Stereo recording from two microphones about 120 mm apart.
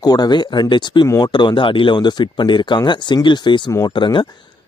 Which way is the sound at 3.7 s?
30° left (ahead or behind).